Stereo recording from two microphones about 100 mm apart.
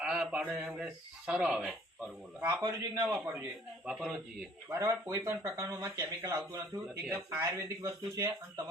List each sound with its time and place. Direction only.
0.0 s speech: 10° right (ahead or behind)
2.4 s speech: 30° right (ahead or behind)
3.1 s a man's voice: 20° right (ahead or behind)
3.8 s speech: 5° right (ahead or behind)
4.7 s speech: 35° right (ahead or behind)